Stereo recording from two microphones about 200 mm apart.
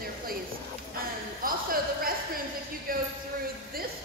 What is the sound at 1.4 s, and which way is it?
Speech, 45° right (ahead or behind).